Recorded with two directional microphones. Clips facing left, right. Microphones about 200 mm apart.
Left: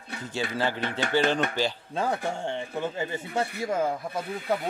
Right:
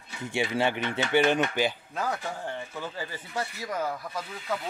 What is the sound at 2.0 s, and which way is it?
Speech, 30° left (ahead or behind).